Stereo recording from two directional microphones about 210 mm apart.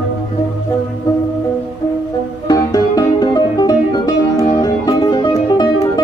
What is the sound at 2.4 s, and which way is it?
Music, 15° left (ahead or behind).